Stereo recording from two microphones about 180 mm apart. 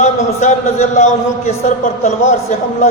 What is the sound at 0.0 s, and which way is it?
A man's voice, 40° left (ahead or behind).